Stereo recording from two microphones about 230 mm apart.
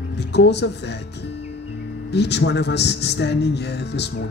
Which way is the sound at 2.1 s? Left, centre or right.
Left.